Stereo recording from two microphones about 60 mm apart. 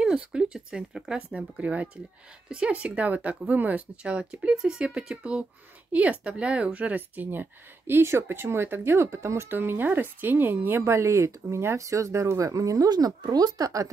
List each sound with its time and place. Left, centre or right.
0.0 s speech: centre; by 9.5 s right
9.5 s speech: right
10.8 s speech: right